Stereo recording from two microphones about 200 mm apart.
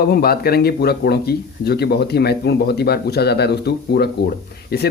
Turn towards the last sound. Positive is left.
turn(degrees=55)  # may be behind; listen again after turning